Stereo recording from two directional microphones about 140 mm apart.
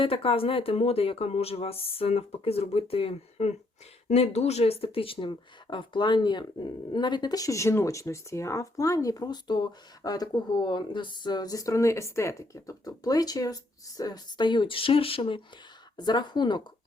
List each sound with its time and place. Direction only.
0.0 s speech: 40° left (ahead or behind)